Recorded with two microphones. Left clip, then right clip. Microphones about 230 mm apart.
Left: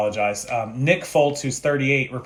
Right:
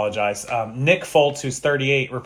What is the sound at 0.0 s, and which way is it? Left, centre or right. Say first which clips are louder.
Speech: even; centre.